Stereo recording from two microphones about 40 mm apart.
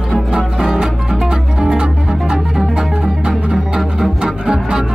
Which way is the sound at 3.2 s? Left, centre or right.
Centre.